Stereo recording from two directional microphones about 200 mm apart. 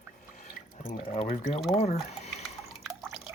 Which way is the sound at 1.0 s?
30° left (ahead or behind).